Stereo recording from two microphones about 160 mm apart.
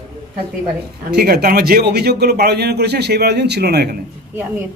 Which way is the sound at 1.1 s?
75° right (ahead or behind).